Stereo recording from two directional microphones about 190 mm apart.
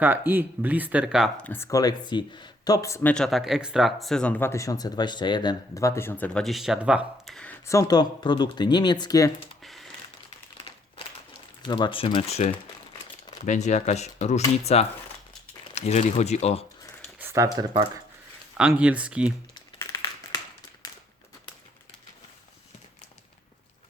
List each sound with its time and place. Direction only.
0.0 s speech: 10° right (ahead or behind)
7.7 s speech: 20° left (ahead or behind)
9.6 s a sound: centre (ahead or behind)
10.2 s a sound: 30° left (ahead or behind)
11.6 s speech: 25° left (ahead or behind)
13.4 s speech: 40° left (ahead or behind)
17.2 s speech: 15° right (ahead or behind)
19.8 s crumpling: 20° left (ahead or behind)